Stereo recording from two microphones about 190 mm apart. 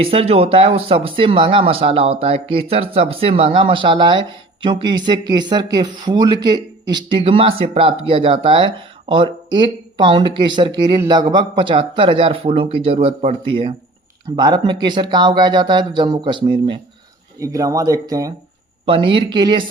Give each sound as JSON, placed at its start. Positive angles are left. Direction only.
{"t": 0.0, "sound": "speech", "side_deg": -30}